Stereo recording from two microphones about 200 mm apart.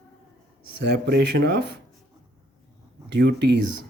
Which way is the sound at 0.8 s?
55° right (ahead or behind).